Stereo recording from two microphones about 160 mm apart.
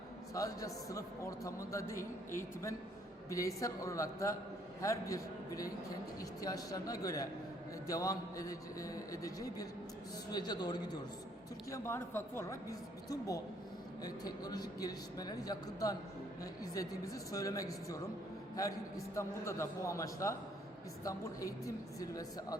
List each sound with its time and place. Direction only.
0.3 s a man's voice: 20° left (ahead or behind)
11.7 s a man's voice: 15° left (ahead or behind)
19.1 s a man's voice: 20° left (ahead or behind)